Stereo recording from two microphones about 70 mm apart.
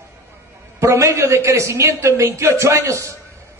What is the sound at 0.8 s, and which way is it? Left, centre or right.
A man's voice, right.